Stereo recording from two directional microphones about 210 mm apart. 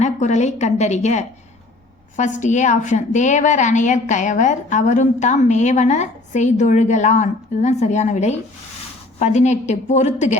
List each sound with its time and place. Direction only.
0.0 s a woman's voice: 35° left (ahead or behind)